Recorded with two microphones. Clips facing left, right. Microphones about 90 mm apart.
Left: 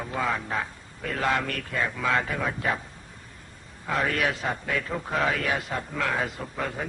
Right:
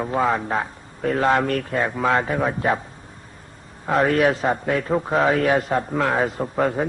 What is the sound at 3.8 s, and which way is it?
A man's voice, 35° right (ahead or behind).